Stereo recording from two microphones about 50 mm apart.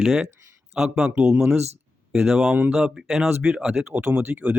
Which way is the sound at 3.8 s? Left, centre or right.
Right.